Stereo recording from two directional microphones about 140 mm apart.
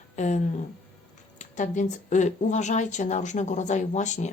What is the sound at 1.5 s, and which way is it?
A woman's voice, 60° left (ahead or behind).